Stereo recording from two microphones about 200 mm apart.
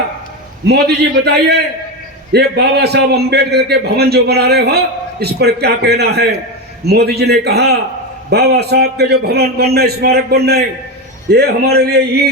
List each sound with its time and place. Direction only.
0.7 s a man's voice: 55° right (ahead or behind)